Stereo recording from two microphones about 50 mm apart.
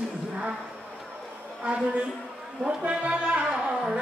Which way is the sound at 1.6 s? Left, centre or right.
Right.